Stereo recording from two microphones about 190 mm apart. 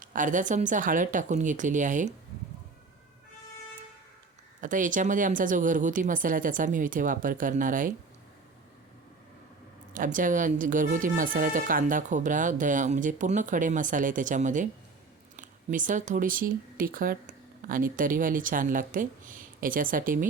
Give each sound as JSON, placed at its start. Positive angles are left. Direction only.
{"t": 0.0, "sound": "speech", "side_deg": -45}
{"t": 4.6, "sound": "speech", "side_deg": -45}
{"t": 9.9, "sound": "speech", "side_deg": -45}